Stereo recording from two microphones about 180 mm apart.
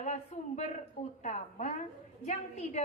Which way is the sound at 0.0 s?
40° left (ahead or behind).